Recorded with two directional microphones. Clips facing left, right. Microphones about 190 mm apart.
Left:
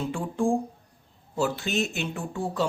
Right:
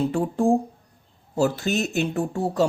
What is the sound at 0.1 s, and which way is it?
Speech, 40° right (ahead or behind).